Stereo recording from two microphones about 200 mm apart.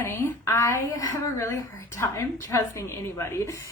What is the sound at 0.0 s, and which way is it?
Speech, 15° left (ahead or behind).